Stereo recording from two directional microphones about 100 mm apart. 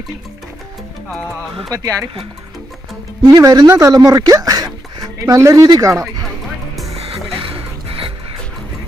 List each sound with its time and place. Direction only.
1.7 s speech: 35° right (ahead or behind)
3.2 s speech: 35° right (ahead or behind)
6.9 s music: 70° right (ahead or behind)